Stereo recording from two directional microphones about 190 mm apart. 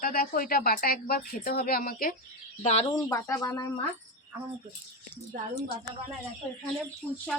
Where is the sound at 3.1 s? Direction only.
15° left (ahead or behind).